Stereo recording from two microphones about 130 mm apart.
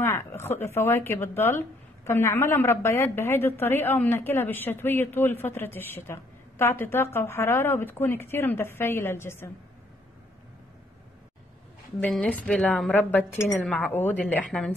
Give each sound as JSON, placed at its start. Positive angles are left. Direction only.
{"t": 0.4, "sound": "a woman's voice", "side_deg": 20}
{"t": 12.0, "sound": "a woman's voice", "side_deg": 10}